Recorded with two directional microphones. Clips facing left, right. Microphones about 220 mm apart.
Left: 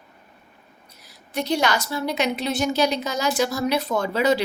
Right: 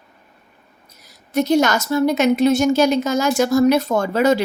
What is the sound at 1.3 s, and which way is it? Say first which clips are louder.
A woman's voice: right 7 dB; 45° right (ahead or behind).